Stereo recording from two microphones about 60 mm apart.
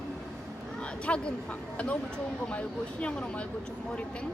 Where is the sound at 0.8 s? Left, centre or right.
Centre.